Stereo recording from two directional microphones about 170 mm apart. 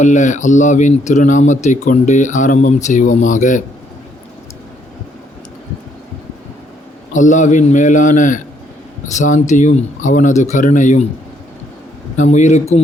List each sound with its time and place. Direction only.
0.0 s speech: 45° left (ahead or behind)
7.1 s speech: 45° left (ahead or behind)
12.1 s speech: 45° left (ahead or behind)